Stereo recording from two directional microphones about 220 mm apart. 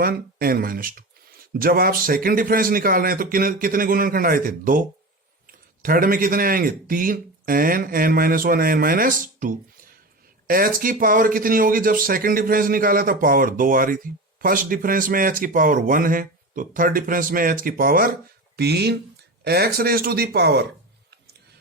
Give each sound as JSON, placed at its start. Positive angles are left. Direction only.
{"t": 0.0, "sound": "speech", "side_deg": -40}